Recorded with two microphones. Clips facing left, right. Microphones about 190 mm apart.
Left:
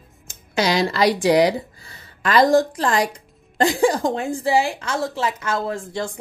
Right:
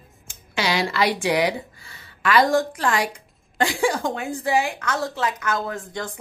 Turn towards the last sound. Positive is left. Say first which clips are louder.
# left 4 dB
turn(degrees=30)  # may be behind; listen again after turning